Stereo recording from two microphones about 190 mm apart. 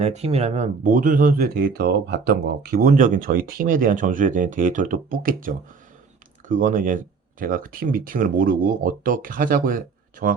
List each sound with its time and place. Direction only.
0.0 s speech: 35° right (ahead or behind)